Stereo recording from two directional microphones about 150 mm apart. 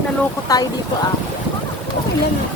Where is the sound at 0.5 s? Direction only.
25° left (ahead or behind).